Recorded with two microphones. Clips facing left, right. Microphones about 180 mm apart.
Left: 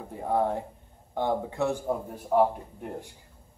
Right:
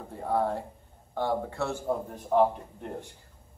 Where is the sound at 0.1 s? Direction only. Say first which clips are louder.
Left 1 dB; 15° left (ahead or behind).